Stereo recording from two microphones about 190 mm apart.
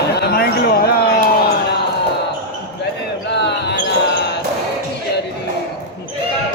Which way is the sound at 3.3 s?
65° left (ahead or behind).